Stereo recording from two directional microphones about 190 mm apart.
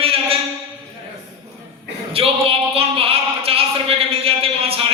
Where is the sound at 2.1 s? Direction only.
30° right (ahead or behind).